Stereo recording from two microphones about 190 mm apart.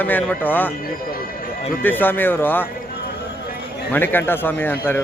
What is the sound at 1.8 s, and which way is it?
Speech, 10° left (ahead or behind).